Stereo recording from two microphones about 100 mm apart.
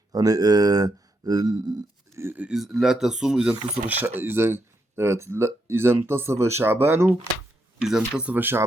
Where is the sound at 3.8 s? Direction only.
20° right (ahead or behind).